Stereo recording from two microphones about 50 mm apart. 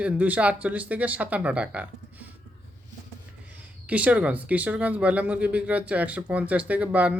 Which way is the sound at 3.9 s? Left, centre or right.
Right.